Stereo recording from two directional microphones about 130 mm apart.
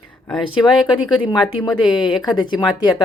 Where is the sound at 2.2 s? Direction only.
35° left (ahead or behind).